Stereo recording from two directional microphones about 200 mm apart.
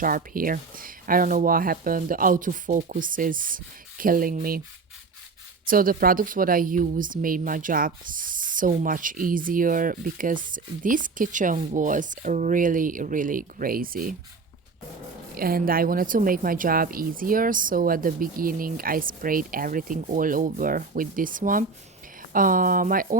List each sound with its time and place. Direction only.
0.0 s speech: 45° right (ahead or behind)
5.6 s speech: 45° right (ahead or behind)
15.4 s speech: 45° right (ahead or behind)